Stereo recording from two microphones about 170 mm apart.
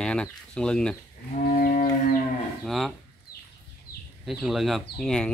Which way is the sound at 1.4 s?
55° left (ahead or behind).